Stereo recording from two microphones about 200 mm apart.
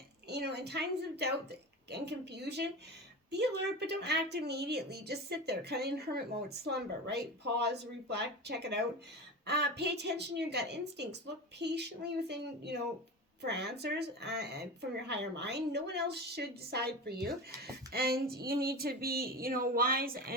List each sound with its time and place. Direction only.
0.3 s speech: 55° right (ahead or behind)